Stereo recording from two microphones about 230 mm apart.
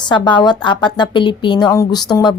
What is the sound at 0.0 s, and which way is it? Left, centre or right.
Speech, centre.